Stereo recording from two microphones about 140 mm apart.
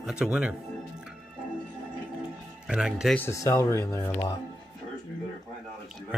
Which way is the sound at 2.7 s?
5° right (ahead or behind).